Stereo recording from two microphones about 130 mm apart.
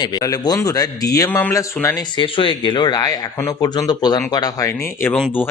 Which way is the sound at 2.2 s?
40° left (ahead or behind).